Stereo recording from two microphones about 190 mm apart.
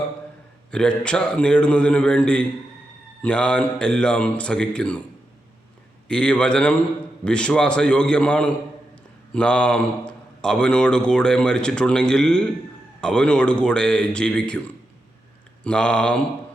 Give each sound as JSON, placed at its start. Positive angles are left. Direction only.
{"t": 0.7, "sound": "a man's voice", "side_deg": 5}
{"t": 6.1, "sound": "a man's voice", "side_deg": 5}
{"t": 15.6, "sound": "a man's voice", "side_deg": 5}